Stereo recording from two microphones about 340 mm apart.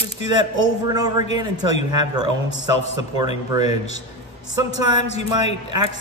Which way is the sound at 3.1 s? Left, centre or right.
Centre.